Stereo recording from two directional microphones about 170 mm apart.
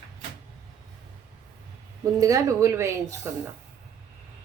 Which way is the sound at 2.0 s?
20° right (ahead or behind).